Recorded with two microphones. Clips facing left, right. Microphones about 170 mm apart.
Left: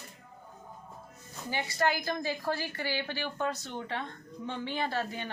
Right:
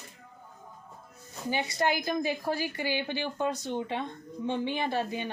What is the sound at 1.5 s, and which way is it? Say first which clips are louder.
A woman's voice: right 1 dB; 20° right (ahead or behind).